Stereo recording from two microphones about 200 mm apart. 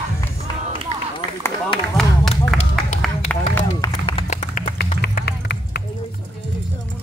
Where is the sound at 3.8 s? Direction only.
25° left (ahead or behind).